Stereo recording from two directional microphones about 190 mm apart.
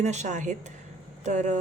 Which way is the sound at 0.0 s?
35° right (ahead or behind).